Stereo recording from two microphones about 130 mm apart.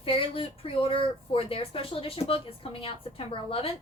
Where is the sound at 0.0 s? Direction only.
45° left (ahead or behind).